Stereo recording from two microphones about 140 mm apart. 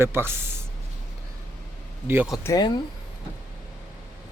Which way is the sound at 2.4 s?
25° left (ahead or behind).